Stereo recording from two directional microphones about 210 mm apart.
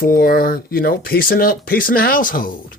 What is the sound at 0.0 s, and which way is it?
Speech, 45° left (ahead or behind).